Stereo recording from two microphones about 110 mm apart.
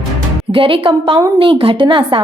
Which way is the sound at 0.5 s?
50° right (ahead or behind).